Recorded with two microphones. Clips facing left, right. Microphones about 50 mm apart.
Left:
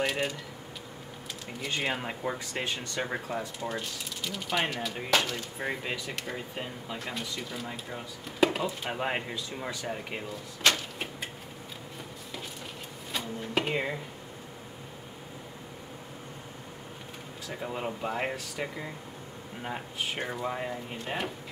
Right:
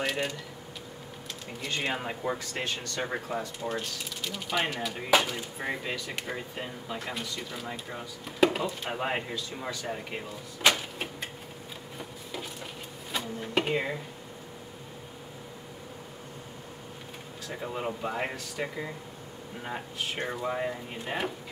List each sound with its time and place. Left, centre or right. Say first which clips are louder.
0.0 s speech: left 1 dB; centre
1.7 s speech: even; centre
2.3 s speech: even; centre
3.0 s speech: right 1 dB; centre
5.6 s speech: even; centre
9.3 s speech: right 1 dB; centre
9.8 s speech: even; centre
10.6 s speech: right 1 dB; centre
13.1 s a sound: right 1 dB; centre
17.6 s speech: right 1 dB; centre